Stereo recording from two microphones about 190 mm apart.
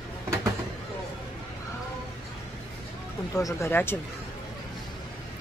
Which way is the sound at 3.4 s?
15° left (ahead or behind).